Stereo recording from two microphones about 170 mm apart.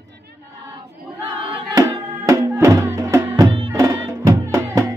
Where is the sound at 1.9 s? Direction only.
15° right (ahead or behind).